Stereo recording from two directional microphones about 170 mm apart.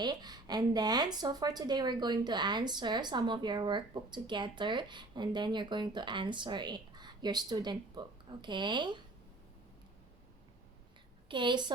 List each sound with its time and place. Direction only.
0.0 s a woman's voice: 25° right (ahead or behind)
11.3 s a woman's voice: 30° right (ahead or behind)